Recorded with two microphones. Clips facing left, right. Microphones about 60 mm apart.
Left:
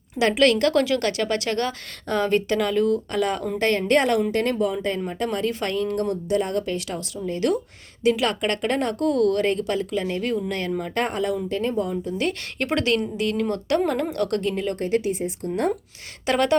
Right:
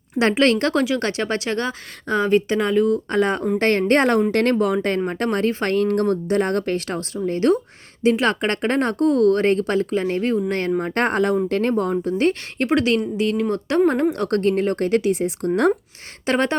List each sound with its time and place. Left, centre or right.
0.2 s speech: right
0.8 s speech: centre
1.0 s a woman's voice: right
3.1 s speech: right
3.6 s speech: right
4.3 s speech: right
10.5 s speech: right
11.4 s speech: right
11.7 s a woman's voice: right
14.3 s speech: right
14.8 s speech: right
16.2 s speech: right